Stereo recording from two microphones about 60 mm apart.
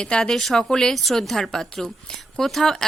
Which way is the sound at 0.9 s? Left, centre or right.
Centre.